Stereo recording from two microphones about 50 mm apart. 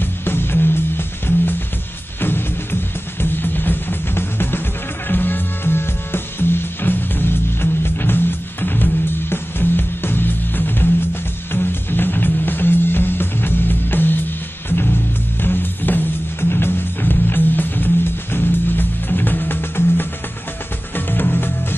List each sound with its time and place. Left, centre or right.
0.0 s music: left
15.4 s music: left